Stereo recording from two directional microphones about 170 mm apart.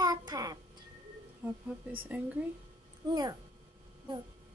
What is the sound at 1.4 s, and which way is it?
Speech, 10° right (ahead or behind).